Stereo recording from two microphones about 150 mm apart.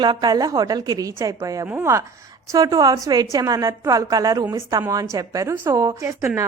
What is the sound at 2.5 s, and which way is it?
A woman's voice, 25° right (ahead or behind).